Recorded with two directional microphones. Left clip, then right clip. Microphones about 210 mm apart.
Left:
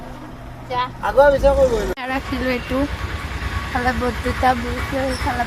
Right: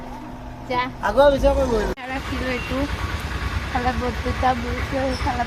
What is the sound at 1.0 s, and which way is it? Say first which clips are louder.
Speech: left 3 dB; 50° right (ahead or behind).